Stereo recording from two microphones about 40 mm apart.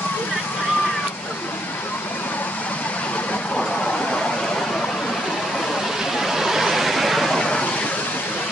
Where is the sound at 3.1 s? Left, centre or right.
Left.